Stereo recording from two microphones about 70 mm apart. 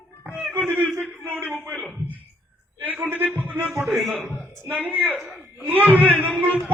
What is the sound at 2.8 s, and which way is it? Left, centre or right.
Speech, right.